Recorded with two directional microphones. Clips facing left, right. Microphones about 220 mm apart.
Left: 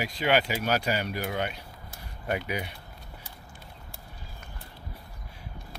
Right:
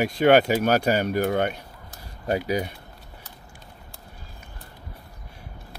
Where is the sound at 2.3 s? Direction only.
40° right (ahead or behind).